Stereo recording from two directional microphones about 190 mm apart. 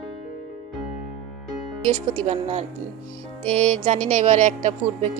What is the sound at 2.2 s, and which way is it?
A woman's voice, 35° right (ahead or behind).